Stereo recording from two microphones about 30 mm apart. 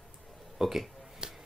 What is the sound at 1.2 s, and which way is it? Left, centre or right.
Music, right.